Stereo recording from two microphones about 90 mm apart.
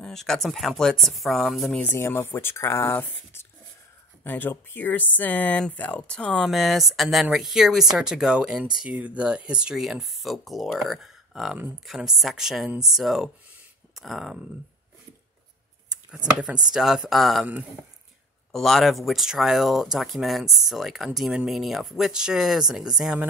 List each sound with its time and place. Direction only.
0.0 s speech: 5° left (ahead or behind)
1.8 s speech: 25° left (ahead or behind); by 14.4 s centre (ahead or behind)
16.3 s speech: 10° right (ahead or behind)
18.5 s speech: 5° left (ahead or behind)